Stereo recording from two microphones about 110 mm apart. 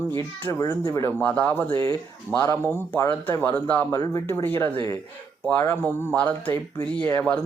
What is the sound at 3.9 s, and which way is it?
Speech, 30° left (ahead or behind).